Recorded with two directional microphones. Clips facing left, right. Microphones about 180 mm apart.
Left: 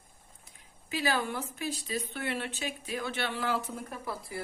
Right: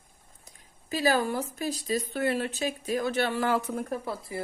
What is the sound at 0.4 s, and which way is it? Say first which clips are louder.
Speech: right 3 dB; 40° right (ahead or behind).